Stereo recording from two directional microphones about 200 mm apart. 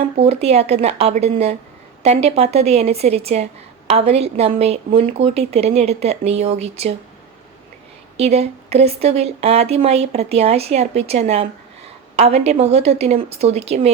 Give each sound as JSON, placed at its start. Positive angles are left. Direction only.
{"t": 0.2, "sound": "speech", "side_deg": -30}
{"t": 8.1, "sound": "speech", "side_deg": -30}